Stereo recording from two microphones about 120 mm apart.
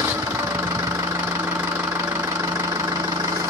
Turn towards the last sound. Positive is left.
turn(degrees=-25)  # may be behind; listen again after turning